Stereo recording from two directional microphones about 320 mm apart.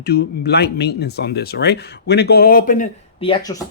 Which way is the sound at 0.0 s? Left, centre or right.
Left.